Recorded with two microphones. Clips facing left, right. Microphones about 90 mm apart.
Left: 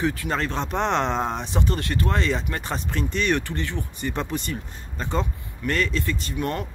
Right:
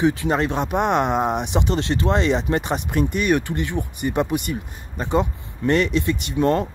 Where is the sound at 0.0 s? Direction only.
20° right (ahead or behind).